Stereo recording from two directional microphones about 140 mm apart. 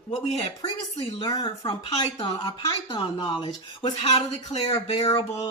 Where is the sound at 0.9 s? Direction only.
30° left (ahead or behind).